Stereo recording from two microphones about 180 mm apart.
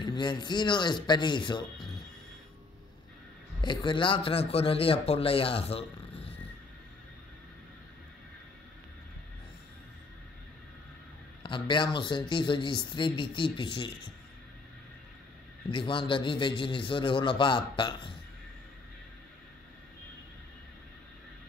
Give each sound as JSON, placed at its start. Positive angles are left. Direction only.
{"t": 0.0, "sound": "speech", "side_deg": 25}
{"t": 3.6, "sound": "a man's voice", "side_deg": 25}
{"t": 11.4, "sound": "speech", "side_deg": 25}
{"t": 15.7, "sound": "speech", "side_deg": 30}